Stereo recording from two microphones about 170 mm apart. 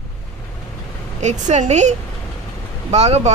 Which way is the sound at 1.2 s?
45° right (ahead or behind).